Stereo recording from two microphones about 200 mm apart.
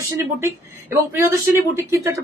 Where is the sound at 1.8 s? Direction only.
15° right (ahead or behind).